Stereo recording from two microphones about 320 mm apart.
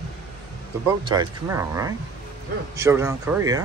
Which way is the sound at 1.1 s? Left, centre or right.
Centre.